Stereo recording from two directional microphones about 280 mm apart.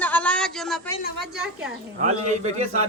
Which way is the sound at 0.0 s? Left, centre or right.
Centre.